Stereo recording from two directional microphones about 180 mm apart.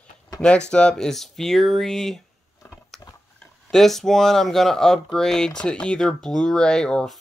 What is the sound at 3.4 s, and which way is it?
Speech, centre (ahead or behind).